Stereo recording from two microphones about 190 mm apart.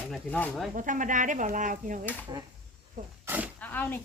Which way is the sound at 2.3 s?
25° right (ahead or behind).